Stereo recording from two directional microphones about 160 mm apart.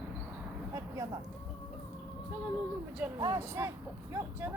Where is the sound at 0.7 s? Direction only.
20° right (ahead or behind).